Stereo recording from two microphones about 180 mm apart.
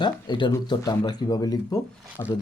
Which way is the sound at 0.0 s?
25° left (ahead or behind).